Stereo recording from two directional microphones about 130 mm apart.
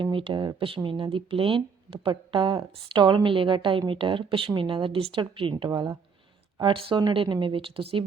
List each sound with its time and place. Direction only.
0.0 s speech: 40° right (ahead or behind)